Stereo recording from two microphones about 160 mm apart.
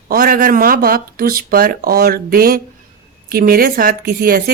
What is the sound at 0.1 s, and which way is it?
A woman's voice, 65° right (ahead or behind).